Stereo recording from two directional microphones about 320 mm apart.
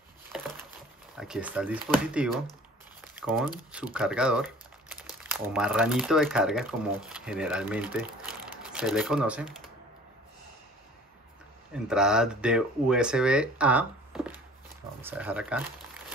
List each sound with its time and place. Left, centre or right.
0.3 s a sound: centre
1.1 s speech: centre
11.7 s speech: centre